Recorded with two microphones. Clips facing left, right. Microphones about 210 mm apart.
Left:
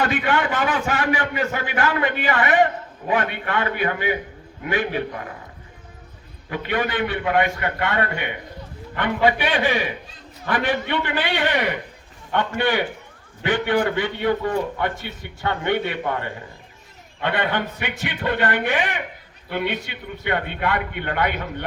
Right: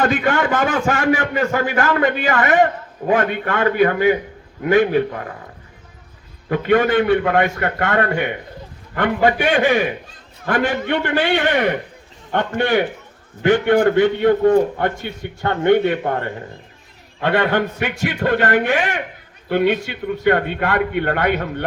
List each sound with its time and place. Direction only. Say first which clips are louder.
0.0 s a man's voice: right 4 dB; 45° right (ahead or behind)
6.5 s a man's voice: right 9 dB; 45° right (ahead or behind)